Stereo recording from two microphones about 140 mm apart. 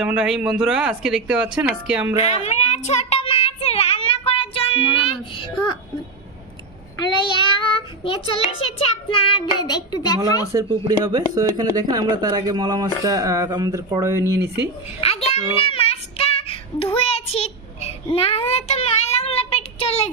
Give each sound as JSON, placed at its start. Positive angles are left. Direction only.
{"t": 0.0, "sound": "speech", "side_deg": -5}
{"t": 2.2, "sound": "child singing", "side_deg": 50}
{"t": 7.0, "sound": "child singing", "side_deg": 35}
{"t": 10.5, "sound": "speech", "side_deg": -25}
{"t": 15.0, "sound": "child singing", "side_deg": 45}